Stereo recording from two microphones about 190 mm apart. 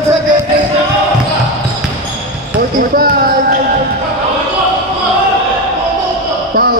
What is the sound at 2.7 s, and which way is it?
Speech, 50° right (ahead or behind).